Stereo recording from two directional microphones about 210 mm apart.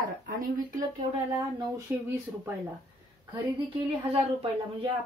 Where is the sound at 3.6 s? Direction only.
25° right (ahead or behind).